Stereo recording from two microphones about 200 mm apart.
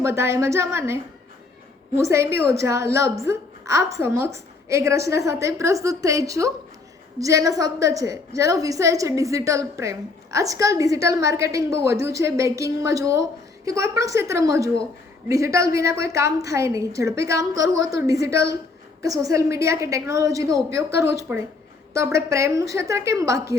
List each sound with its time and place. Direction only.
0.0 s a woman's voice: 15° right (ahead or behind)
2.0 s a woman's voice: 15° right (ahead or behind)